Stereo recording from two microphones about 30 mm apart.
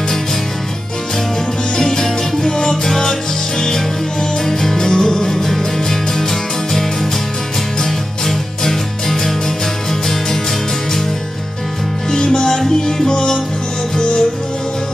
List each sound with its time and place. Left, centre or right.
1.8 s music: centre
12.1 s music: left